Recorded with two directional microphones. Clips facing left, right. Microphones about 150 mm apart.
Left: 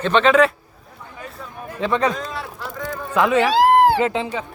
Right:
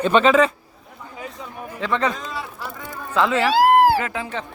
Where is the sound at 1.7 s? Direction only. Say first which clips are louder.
Left 3 dB; 15° left (ahead or behind).